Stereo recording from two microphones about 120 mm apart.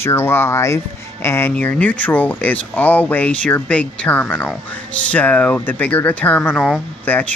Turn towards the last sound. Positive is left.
turn(degrees=5)  # may be behind; listen again after turning